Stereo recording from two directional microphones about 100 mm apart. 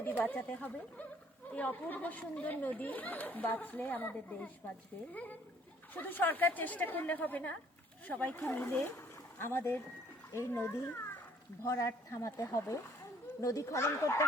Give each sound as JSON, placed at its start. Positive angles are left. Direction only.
{"t": 0.2, "sound": "a child's voice", "side_deg": 15}